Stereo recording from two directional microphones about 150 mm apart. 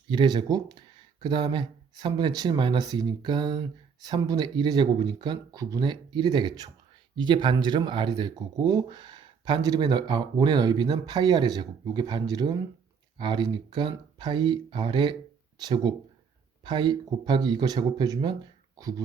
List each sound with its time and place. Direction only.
0.1 s speech: 30° right (ahead or behind)